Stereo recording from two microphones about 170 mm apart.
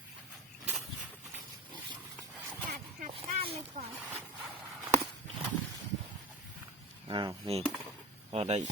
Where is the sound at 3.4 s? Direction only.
35° right (ahead or behind).